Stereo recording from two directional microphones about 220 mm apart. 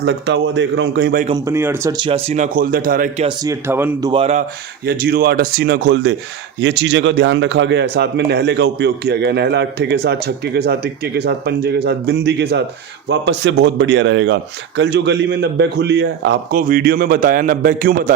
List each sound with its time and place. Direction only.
0.0 s speech: 50° right (ahead or behind)
1.5 s speech: 10° right (ahead or behind); by 3.2 s 40° right (ahead or behind)
3.2 s speech: 15° right (ahead or behind)
4.1 s speech: 30° right (ahead or behind)
4.9 s speech: 45° right (ahead or behind)
16.6 s a man's voice: 40° right (ahead or behind)